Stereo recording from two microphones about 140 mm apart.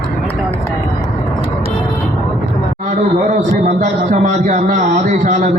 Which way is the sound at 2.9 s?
55° right (ahead or behind).